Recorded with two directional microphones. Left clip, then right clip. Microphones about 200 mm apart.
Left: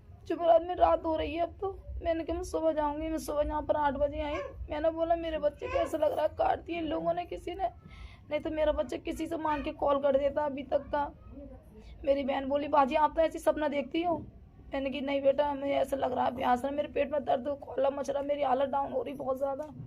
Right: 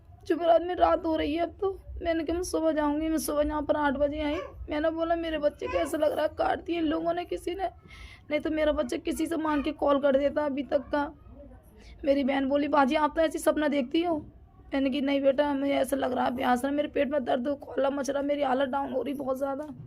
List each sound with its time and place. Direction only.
0.3 s a woman's voice: 45° right (ahead or behind)